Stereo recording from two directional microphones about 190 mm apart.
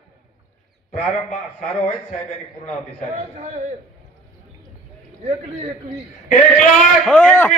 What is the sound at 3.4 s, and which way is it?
Speech, 40° right (ahead or behind).